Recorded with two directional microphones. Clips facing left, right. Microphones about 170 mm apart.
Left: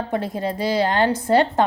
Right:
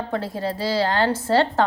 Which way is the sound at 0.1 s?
20° left (ahead or behind).